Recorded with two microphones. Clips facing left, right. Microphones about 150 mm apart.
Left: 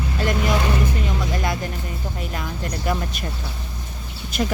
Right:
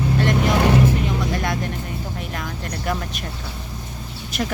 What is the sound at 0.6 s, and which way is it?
Vehicle, 75° right (ahead or behind).